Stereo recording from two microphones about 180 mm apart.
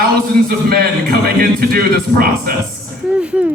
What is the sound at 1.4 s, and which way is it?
Speech, 55° right (ahead or behind).